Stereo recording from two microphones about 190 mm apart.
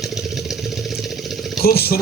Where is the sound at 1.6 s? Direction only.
55° left (ahead or behind).